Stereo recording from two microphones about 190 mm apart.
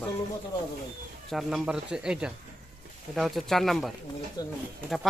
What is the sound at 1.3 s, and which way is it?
Speech, centre (ahead or behind).